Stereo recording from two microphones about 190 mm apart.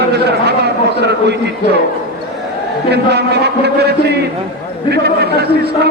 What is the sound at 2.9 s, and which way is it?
A man's voice, 60° right (ahead or behind).